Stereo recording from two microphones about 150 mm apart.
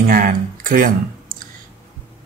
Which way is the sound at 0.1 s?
70° right (ahead or behind).